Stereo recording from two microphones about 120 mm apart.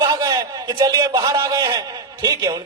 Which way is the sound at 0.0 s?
30° right (ahead or behind).